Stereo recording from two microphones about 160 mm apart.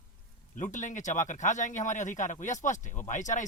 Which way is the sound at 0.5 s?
50° left (ahead or behind).